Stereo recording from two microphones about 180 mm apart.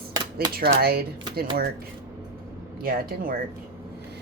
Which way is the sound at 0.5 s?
60° right (ahead or behind).